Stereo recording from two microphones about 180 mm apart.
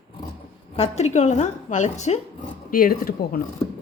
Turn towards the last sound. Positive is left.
turn(degrees=55)  # may be behind; listen again after turning